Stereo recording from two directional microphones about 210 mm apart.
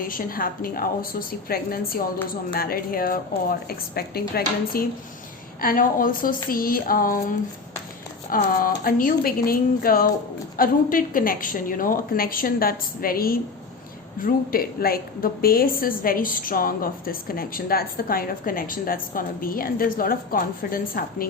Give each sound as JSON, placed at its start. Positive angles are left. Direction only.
{"t": 0.0, "sound": "a woman's voice", "side_deg": 40}
{"t": 8.4, "sound": "a woman's voice", "side_deg": 40}